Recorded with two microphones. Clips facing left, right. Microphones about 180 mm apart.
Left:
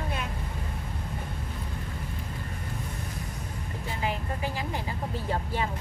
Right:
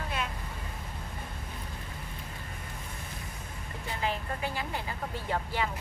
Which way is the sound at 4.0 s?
20° left (ahead or behind).